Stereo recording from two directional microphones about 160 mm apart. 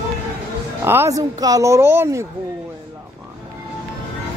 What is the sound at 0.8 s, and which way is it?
Speech, 15° right (ahead or behind).